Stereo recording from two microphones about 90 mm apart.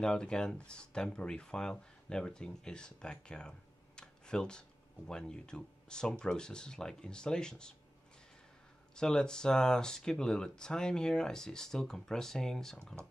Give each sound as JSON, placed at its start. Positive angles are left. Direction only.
{"t": 0.0, "sound": "speech", "side_deg": 10}
{"t": 8.9, "sound": "speech", "side_deg": 5}